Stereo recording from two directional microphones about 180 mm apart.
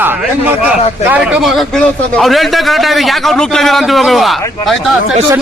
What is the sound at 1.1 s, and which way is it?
A man's voice, 5° right (ahead or behind).